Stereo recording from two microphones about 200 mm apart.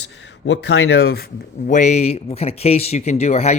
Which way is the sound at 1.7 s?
35° left (ahead or behind).